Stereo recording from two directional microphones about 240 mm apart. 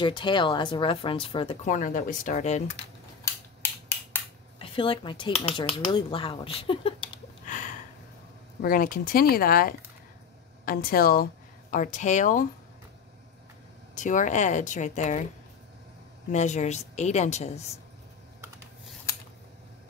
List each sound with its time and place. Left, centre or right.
0.0 s speech: centre
4.6 s speech: left
7.4 s a sound: left
8.6 s speech: left
13.9 s speech: left
16.3 s speech: left